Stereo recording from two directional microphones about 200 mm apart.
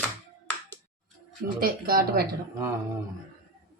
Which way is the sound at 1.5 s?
45° right (ahead or behind).